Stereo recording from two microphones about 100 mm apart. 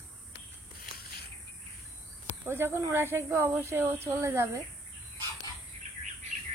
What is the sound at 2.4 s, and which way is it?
Speech, 25° right (ahead or behind).